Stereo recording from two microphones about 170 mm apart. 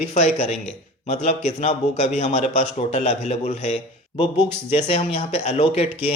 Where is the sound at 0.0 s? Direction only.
40° left (ahead or behind).